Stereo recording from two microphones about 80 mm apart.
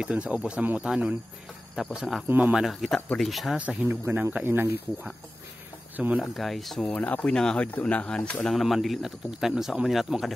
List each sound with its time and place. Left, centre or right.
0.0 s speech: centre
2.2 s speech: right
2.5 s speech: centre
3.5 s speech: centre
5.9 s speech: centre
6.3 s speech: centre
6.9 s speech: centre
8.5 s speech: centre